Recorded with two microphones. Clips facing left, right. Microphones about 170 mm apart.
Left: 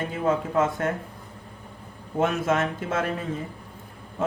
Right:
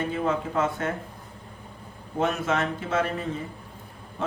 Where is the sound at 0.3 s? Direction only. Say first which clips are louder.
Left 6 dB; 50° left (ahead or behind).